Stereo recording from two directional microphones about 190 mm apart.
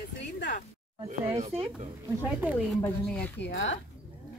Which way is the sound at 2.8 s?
5° left (ahead or behind).